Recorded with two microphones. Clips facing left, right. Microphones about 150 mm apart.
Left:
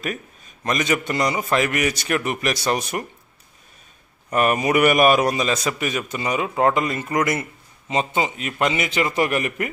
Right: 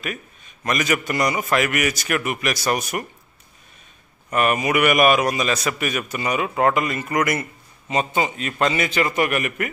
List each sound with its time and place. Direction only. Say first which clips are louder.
0.7 s a man's voice: even; 25° left (ahead or behind)
4.3 s a man's voice: left 1 dB; 30° left (ahead or behind)